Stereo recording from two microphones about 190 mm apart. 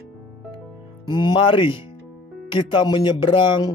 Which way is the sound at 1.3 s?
25° left (ahead or behind).